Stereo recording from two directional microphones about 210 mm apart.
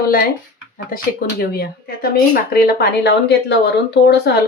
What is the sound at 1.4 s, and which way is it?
Speech, 45° left (ahead or behind).